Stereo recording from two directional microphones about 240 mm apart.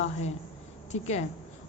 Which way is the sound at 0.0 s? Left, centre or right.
Left.